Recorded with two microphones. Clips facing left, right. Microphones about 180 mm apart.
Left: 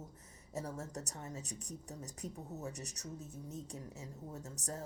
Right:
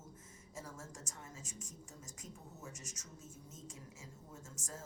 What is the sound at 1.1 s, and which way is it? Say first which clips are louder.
A woman's voice: left 7 dB; 35° left (ahead or behind).